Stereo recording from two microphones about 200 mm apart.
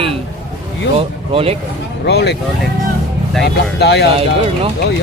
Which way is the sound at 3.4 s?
55° left (ahead or behind).